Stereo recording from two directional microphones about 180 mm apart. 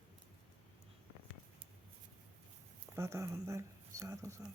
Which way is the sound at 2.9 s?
15° right (ahead or behind).